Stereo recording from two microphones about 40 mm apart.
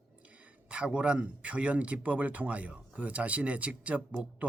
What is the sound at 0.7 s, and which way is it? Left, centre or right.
A man's voice, right.